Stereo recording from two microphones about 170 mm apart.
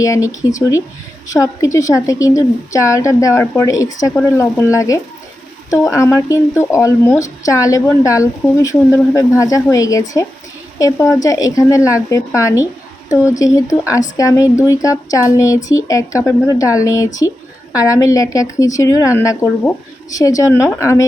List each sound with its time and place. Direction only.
0.0 s speech: 20° left (ahead or behind)